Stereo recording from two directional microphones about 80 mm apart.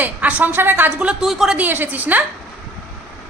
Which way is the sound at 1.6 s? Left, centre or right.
Right.